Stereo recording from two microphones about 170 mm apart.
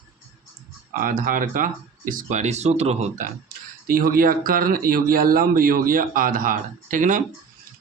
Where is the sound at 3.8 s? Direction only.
55° right (ahead or behind).